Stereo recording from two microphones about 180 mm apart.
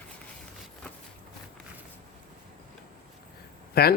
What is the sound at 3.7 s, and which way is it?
Speech, 60° left (ahead or behind).